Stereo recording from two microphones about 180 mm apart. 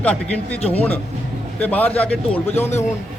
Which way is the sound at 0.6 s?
35° left (ahead or behind).